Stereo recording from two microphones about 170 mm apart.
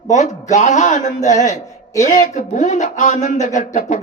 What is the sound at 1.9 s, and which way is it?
Speech, 45° left (ahead or behind).